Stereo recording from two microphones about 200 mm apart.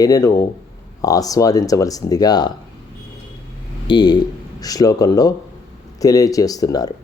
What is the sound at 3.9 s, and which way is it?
A man's voice, 20° left (ahead or behind).